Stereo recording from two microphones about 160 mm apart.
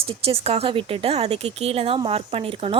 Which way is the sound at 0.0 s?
35° right (ahead or behind).